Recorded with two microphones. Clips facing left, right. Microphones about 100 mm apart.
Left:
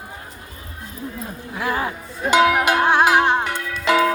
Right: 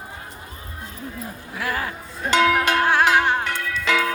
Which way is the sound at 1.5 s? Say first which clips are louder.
Left 4 dB; 20° left (ahead or behind).